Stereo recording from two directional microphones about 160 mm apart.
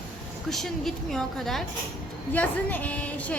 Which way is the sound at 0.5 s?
Centre (ahead or behind).